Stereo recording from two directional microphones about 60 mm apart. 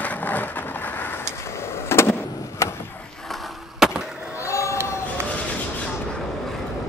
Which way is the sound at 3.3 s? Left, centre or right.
Centre.